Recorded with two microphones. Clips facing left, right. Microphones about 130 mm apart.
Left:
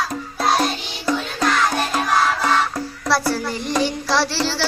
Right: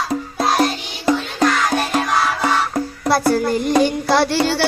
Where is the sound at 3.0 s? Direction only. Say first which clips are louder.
Right 4 dB; 50° right (ahead or behind).